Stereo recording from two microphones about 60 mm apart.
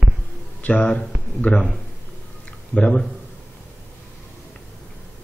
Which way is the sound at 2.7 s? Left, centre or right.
Centre.